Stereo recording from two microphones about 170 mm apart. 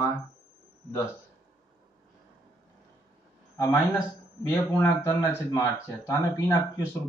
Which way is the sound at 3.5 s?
20° left (ahead or behind).